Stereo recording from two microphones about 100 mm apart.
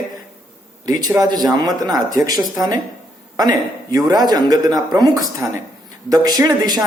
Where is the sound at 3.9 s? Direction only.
40° right (ahead or behind).